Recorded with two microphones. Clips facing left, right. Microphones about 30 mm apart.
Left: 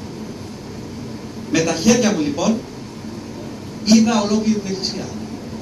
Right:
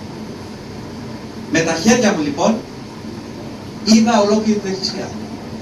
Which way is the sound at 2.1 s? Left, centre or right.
Centre.